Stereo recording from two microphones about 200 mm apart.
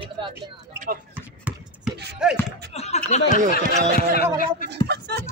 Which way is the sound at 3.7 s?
40° right (ahead or behind).